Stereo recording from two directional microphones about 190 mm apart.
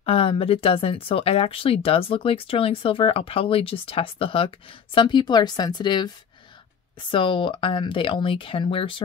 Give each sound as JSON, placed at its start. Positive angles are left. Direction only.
{"t": 0.0, "sound": "speech", "side_deg": 30}